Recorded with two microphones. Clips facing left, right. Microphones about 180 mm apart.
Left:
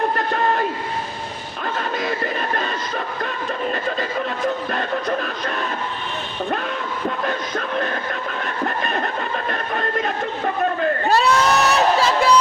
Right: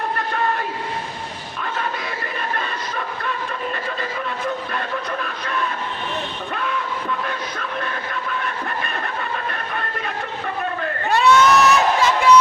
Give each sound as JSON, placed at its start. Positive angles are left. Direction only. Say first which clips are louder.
{"t": 4.7, "sound": "music", "louder": "left 4 dB", "side_deg": 45}
{"t": 7.3, "sound": "music", "louder": "left 4 dB", "side_deg": 45}
{"t": 8.6, "sound": "train", "louder": "left 4 dB", "side_deg": 45}
{"t": 11.1, "sound": "crowd", "louder": "right 4 dB", "side_deg": 35}